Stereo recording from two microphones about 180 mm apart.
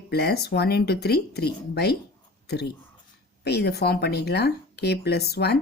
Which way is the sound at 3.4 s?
65° left (ahead or behind).